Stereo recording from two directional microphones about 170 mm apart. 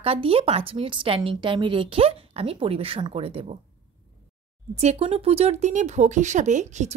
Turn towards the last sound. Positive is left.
turn(degrees=-45)  # may be behind; listen again after turning